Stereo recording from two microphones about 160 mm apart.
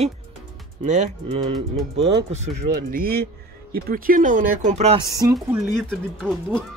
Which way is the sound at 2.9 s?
65° right (ahead or behind).